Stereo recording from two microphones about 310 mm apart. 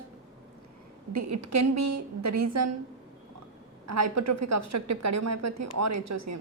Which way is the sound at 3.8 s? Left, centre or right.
Right.